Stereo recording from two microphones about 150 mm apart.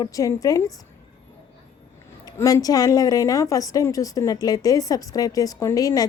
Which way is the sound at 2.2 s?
25° left (ahead or behind).